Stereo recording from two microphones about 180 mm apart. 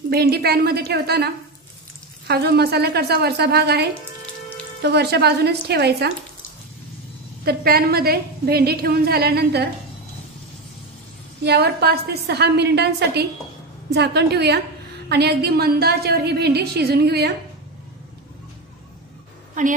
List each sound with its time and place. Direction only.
0.1 s a woman's voice: 60° right (ahead or behind)
7.4 s a woman's voice: 60° right (ahead or behind)
11.4 s a woman's voice: 60° right (ahead or behind)